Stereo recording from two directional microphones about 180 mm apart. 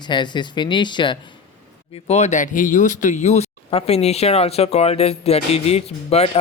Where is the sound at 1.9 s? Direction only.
40° left (ahead or behind).